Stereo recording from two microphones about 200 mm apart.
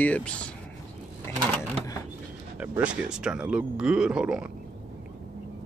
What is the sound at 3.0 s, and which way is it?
Speech, 5° right (ahead or behind).